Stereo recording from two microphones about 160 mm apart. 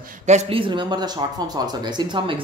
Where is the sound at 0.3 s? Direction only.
40° right (ahead or behind).